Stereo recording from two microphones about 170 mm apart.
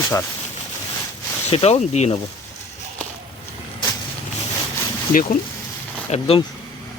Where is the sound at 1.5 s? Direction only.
35° left (ahead or behind).